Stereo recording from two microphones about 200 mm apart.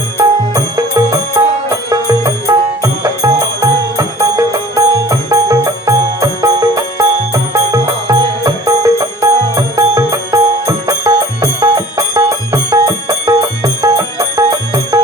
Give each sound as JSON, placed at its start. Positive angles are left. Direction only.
{"t": 0.2, "sound": "music", "side_deg": -15}